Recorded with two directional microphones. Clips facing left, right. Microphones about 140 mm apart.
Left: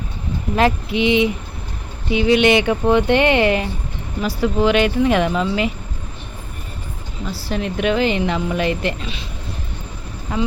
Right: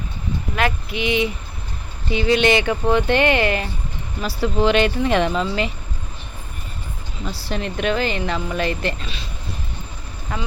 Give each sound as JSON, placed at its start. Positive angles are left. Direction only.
{"t": 0.5, "sound": "speech", "side_deg": 30}
{"t": 7.4, "sound": "speech", "side_deg": 10}